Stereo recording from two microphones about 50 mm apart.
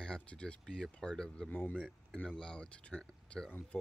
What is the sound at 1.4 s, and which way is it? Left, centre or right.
Speech, left.